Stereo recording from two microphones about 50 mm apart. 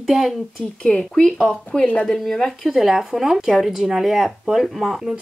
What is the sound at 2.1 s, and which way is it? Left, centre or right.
Speech, centre.